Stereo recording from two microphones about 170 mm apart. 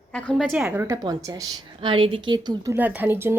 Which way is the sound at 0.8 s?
20° right (ahead or behind).